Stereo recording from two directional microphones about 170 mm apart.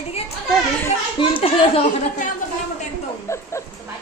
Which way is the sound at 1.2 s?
30° left (ahead or behind).